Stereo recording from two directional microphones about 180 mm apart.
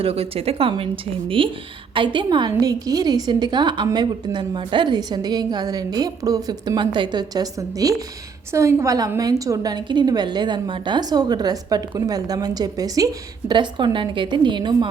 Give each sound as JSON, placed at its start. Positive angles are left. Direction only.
{"t": 0.0, "sound": "a woman's voice", "side_deg": -35}